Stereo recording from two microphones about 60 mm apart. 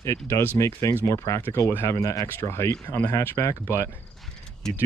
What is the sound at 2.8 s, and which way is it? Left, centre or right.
Speech, left.